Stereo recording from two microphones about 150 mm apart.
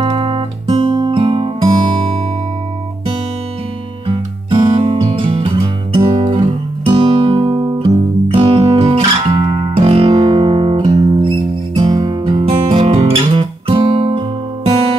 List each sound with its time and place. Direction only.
0.0 s music: 35° right (ahead or behind)
4.5 s music: 35° right (ahead or behind)
5.9 s guitar: 35° right (ahead or behind)
8.3 s music: 40° right (ahead or behind)